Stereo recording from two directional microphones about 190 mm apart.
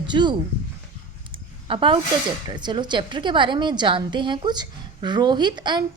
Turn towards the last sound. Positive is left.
turn(degrees=-25)  # may be behind; listen again after turning